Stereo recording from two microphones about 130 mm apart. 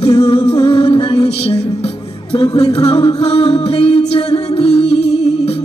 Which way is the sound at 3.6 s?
50° left (ahead or behind).